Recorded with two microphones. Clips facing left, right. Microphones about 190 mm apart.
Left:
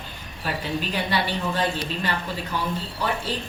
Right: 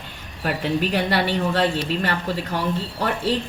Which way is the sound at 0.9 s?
75° right (ahead or behind).